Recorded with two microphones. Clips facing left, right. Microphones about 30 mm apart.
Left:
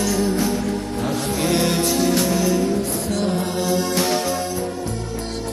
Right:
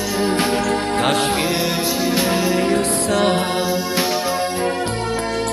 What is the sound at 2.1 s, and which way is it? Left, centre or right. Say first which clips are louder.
Music: right 1 dB; right.